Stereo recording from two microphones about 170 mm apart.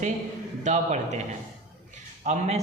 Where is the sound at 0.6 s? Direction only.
45° right (ahead or behind).